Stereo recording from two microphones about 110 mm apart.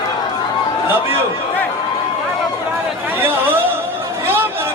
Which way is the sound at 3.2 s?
20° right (ahead or behind).